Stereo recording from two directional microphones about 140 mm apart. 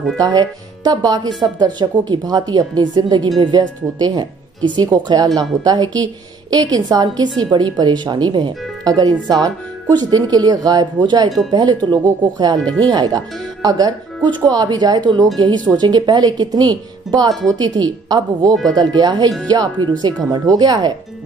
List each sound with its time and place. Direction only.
0.2 s speech: 30° right (ahead or behind)